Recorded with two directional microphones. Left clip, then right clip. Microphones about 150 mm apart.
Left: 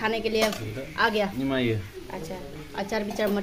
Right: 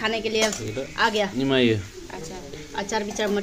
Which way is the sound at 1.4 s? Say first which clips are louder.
Right 6 dB; 70° right (ahead or behind).